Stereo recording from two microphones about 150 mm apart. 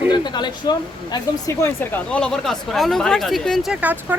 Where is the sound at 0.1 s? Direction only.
30° left (ahead or behind).